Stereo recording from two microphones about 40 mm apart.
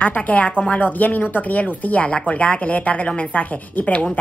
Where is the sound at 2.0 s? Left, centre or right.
Left.